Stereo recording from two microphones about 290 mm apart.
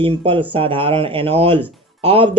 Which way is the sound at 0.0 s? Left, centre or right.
Centre.